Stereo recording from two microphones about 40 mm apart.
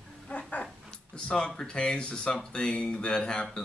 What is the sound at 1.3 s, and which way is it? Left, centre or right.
A man's voice, centre.